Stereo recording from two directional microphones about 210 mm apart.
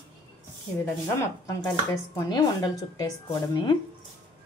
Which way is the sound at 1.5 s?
15° left (ahead or behind).